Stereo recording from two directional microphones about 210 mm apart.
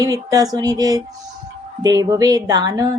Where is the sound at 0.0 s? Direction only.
15° right (ahead or behind).